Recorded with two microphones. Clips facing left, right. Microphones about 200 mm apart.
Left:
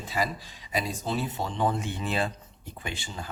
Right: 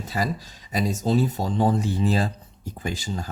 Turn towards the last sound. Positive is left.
turn(degrees=-40)  # may be behind; listen again after turning